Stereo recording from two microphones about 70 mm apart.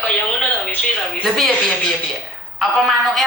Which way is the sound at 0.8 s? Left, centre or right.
Centre.